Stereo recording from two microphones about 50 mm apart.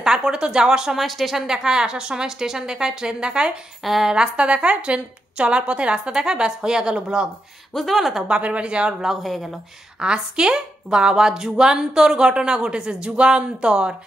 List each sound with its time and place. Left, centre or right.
0.0 s speech: centre
0.9 s a woman's voice: centre
3.8 s speech: centre
4.1 s a woman's voice: right
7.7 s speech: centre
8.4 s a woman's voice: right
9.0 s speech: centre
9.9 s a woman's voice: centre